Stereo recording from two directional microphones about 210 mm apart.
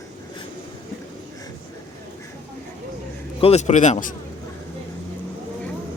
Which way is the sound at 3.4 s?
30° left (ahead or behind).